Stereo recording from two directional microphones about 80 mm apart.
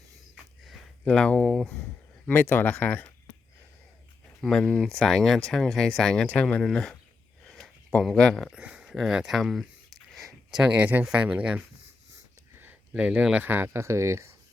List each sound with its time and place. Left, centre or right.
1.0 s speech: centre
2.2 s speech: left
4.4 s speech: centre
7.4 s a sound: centre
8.0 s speech: centre
8.4 s speech: centre
9.0 s a sound: centre
10.6 s speech: centre
12.9 s speech: centre; by 14.3 s right